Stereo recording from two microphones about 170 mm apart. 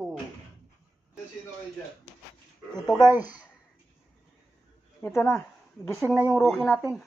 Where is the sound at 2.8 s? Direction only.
20° left (ahead or behind).